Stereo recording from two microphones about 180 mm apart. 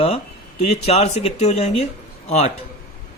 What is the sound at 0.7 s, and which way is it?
A man's voice, 35° left (ahead or behind).